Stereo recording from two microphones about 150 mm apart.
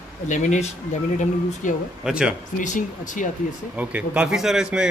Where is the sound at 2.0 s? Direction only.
5° right (ahead or behind).